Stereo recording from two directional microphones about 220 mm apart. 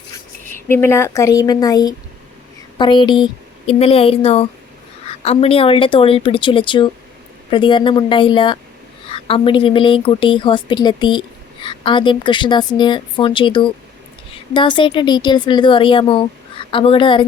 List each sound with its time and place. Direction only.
0.5 s speech: 10° left (ahead or behind)